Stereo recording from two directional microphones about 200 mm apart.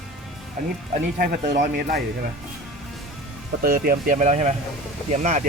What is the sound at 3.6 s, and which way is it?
Speech, 45° right (ahead or behind).